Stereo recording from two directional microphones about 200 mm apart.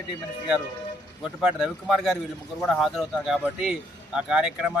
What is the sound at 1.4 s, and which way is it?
A man's voice, 5° right (ahead or behind).